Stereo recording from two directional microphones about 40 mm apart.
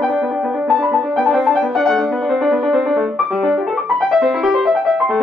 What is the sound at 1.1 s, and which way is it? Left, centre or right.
Music, centre.